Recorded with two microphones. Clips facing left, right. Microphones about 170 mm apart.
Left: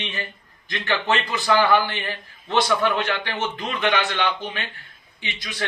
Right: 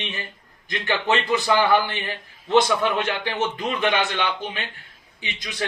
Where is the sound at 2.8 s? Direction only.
15° right (ahead or behind).